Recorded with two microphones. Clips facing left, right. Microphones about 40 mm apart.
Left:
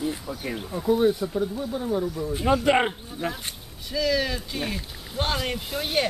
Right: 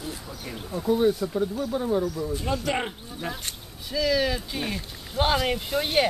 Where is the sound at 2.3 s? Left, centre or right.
Left.